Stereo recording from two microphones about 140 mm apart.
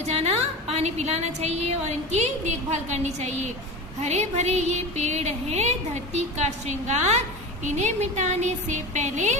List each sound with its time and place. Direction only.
0.0 s a woman's voice: 50° right (ahead or behind)